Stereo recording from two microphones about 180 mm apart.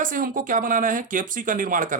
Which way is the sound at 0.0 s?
50° right (ahead or behind).